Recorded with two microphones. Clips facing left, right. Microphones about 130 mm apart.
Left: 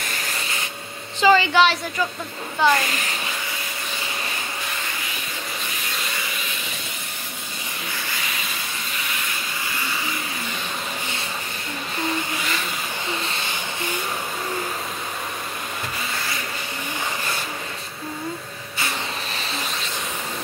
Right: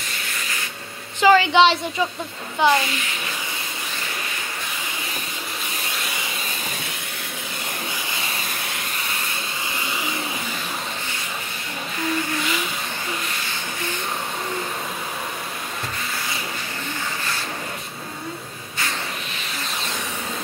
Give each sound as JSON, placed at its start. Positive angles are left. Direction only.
{"t": 1.2, "sound": "a sound", "side_deg": -10}
{"t": 1.5, "sound": "a woman's voice", "side_deg": -25}
{"t": 2.6, "sound": "speech", "side_deg": -15}